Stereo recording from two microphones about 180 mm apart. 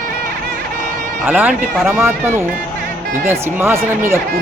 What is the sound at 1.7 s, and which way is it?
Speech, centre (ahead or behind).